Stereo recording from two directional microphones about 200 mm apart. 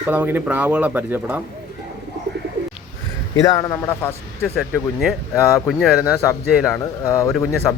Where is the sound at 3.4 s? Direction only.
15° left (ahead or behind).